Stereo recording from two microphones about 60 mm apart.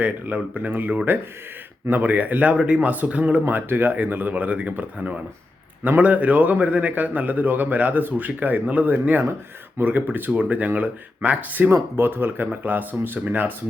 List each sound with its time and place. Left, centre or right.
0.0 s a man's voice: right
3.4 s a man's voice: right
11.7 s speech: right